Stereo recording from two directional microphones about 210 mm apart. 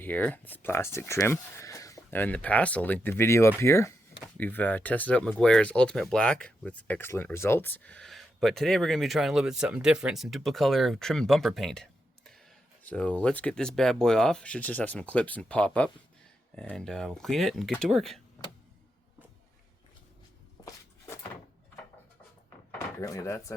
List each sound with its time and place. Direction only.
0.0 s speech: 10° left (ahead or behind)
20.6 s a sound: 15° left (ahead or behind)
23.0 s speech: 15° left (ahead or behind)